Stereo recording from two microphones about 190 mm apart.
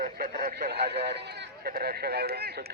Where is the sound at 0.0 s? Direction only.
50° right (ahead or behind).